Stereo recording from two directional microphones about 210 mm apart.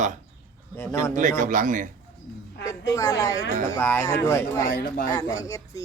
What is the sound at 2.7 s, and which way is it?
Speech, 15° left (ahead or behind).